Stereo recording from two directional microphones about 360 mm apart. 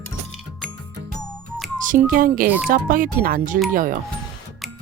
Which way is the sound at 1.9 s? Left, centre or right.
Right.